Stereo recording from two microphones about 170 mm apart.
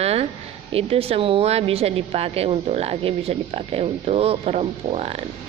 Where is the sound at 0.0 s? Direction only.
35° right (ahead or behind).